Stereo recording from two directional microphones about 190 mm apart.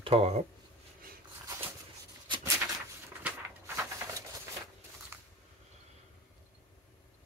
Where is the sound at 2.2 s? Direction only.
25° right (ahead or behind).